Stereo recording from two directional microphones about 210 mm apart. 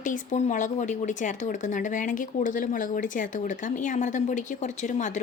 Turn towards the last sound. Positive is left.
turn(degrees=35)  # may be behind; listen again after turning